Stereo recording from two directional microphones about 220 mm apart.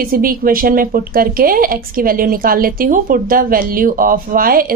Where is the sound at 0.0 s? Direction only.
40° right (ahead or behind).